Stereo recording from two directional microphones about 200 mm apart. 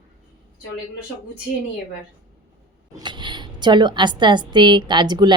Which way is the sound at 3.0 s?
25° right (ahead or behind).